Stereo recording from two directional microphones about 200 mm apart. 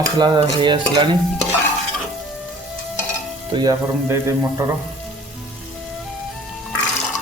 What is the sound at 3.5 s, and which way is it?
Stir, 20° right (ahead or behind).